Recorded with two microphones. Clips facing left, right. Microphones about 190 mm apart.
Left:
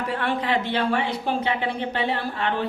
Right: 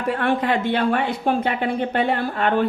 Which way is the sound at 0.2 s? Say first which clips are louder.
Right 3 dB; 50° right (ahead or behind).